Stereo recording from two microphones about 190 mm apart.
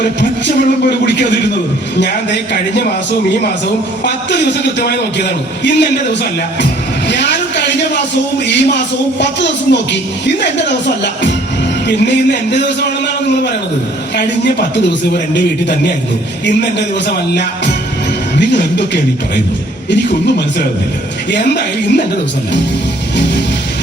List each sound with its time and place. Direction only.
0.0 s speech: 65° left (ahead or behind)
4.0 s speech: 65° left (ahead or behind)
7.1 s a sound: 65° left (ahead or behind)
8.4 s speech: 65° left (ahead or behind)
14.2 s speech: 65° left (ahead or behind)
16.5 s speech: 65° left (ahead or behind)
18.3 s speech: 65° left (ahead or behind)
21.2 s speech: 65° left (ahead or behind)